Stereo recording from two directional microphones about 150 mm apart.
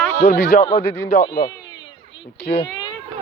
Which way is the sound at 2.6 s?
30° left (ahead or behind).